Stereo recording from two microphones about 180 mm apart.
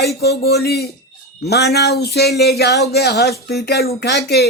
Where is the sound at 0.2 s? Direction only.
65° left (ahead or behind).